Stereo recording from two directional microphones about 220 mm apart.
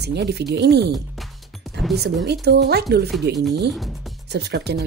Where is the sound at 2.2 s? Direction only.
50° right (ahead or behind).